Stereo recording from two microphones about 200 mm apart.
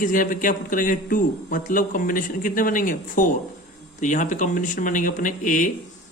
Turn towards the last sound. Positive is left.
turn(degrees=40)  # may be behind; listen again after turning